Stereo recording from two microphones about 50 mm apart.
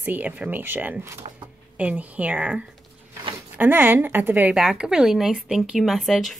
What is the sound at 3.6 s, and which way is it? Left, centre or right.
Speech, right.